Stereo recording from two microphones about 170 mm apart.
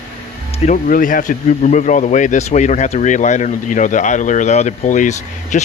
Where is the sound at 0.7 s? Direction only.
50° left (ahead or behind).